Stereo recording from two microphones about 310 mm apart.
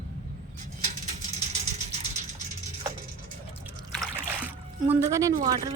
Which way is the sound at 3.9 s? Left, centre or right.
Centre.